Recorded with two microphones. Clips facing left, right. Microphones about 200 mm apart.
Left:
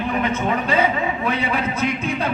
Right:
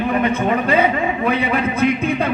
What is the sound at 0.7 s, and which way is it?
A man's voice, 55° right (ahead or behind).